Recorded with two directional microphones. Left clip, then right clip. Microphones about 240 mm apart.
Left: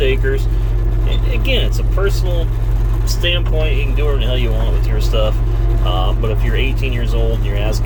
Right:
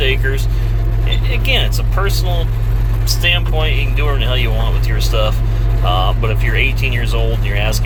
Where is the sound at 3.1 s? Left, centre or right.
Centre.